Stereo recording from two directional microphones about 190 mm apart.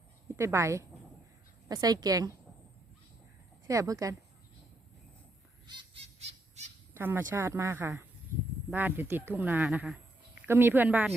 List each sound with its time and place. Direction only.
0.3 s a woman's voice: 15° right (ahead or behind)
3.7 s speech: 15° right (ahead or behind)
5.6 s a sound: 25° right (ahead or behind)
6.9 s speech: 10° right (ahead or behind)